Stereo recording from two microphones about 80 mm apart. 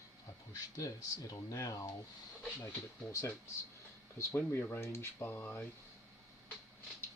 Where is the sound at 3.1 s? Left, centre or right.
Left.